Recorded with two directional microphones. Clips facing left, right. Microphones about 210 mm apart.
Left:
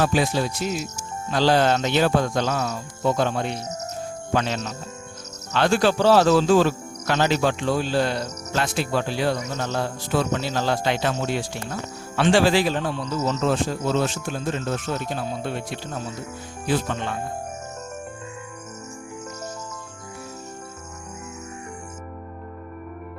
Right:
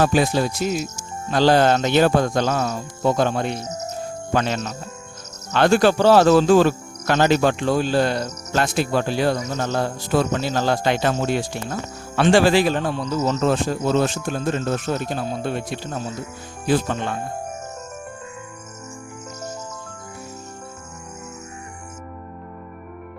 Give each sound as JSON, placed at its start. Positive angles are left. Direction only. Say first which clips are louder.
{"t": 0.0, "sound": "speech", "louder": "right 3 dB", "side_deg": -50}